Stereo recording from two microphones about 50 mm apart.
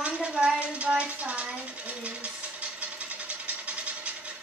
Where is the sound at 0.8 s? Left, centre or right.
Right.